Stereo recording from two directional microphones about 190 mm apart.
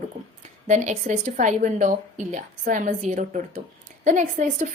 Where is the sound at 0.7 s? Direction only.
40° right (ahead or behind).